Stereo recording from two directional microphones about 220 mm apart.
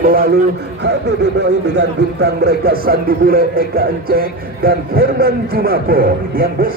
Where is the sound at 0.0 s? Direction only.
40° right (ahead or behind).